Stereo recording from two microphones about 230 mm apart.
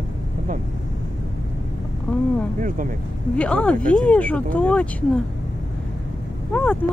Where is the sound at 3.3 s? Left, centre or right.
Centre.